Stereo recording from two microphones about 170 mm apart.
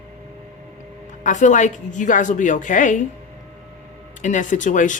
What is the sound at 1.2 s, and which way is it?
A woman's voice, 45° left (ahead or behind).